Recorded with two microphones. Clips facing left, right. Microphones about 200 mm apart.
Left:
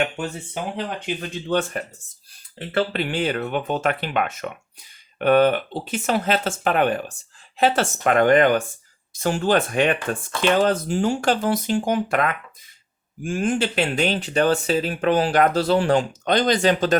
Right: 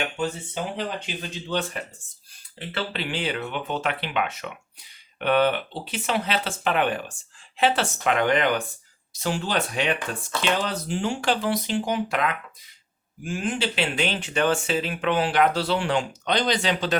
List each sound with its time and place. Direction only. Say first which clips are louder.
0.0 s speech: left 3 dB; 55° left (ahead or behind)